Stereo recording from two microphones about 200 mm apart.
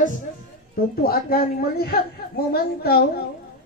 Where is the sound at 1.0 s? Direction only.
50° left (ahead or behind).